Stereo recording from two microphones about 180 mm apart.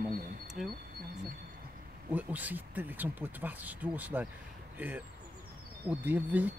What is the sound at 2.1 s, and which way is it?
Speech, 10° right (ahead or behind).